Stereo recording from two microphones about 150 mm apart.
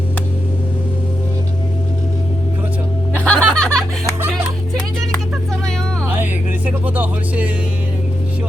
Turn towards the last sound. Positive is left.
turn(degrees=-10)  # may be behind; listen again after turning